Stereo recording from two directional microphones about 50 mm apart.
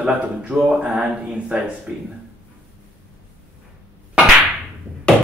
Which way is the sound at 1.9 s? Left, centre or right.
Right.